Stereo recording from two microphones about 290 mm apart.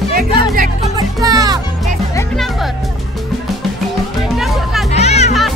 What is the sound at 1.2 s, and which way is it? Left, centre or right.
Music, centre.